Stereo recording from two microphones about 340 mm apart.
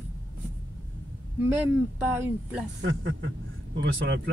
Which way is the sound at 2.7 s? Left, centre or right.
Right.